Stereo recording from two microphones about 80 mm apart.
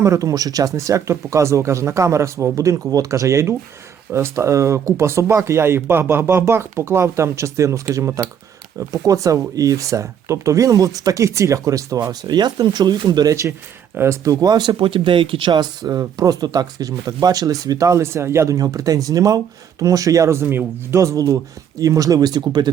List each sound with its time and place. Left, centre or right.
0.0 s speech: right
12.3 s speech: right
14.0 s speech: right
14.4 s speech: right
21.0 s speech: right